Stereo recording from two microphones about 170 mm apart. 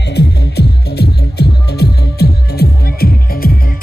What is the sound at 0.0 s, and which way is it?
Music, 80° left.